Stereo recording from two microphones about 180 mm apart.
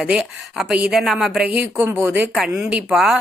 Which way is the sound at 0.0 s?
Centre (ahead or behind).